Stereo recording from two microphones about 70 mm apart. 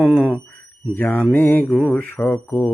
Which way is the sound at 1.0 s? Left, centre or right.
Left.